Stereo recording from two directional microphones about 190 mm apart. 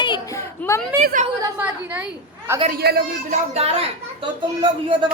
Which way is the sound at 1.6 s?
5° right (ahead or behind).